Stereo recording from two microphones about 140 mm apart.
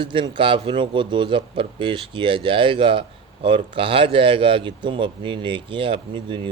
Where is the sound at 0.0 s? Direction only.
35° right (ahead or behind).